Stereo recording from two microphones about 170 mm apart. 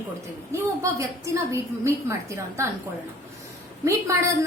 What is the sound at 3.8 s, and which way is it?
Speech, 15° right (ahead or behind).